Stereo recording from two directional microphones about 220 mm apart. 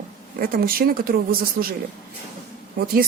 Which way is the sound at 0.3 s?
40° right (ahead or behind).